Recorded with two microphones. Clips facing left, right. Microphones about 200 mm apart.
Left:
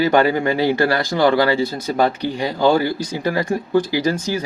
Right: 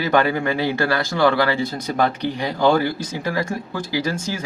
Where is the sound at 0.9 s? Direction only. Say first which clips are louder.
Left 2 dB; 15° left (ahead or behind).